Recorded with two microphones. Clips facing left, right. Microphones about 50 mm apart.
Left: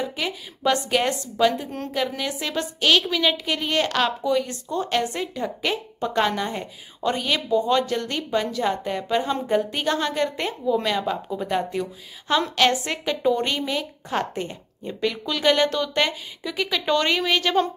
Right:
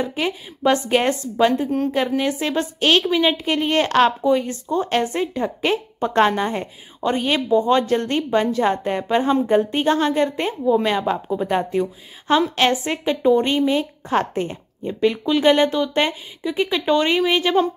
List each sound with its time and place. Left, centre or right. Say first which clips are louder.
0.0 s a woman's voice: right 4 dB; right